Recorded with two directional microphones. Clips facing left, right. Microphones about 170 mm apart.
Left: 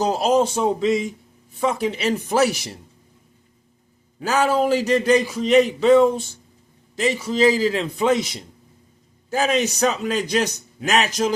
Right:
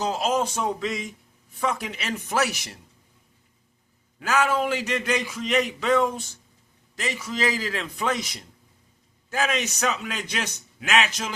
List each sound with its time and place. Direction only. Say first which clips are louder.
0.0 s speech: left 6 dB; 35° left (ahead or behind)
4.2 s a man's voice: left 4 dB; 30° left (ahead or behind)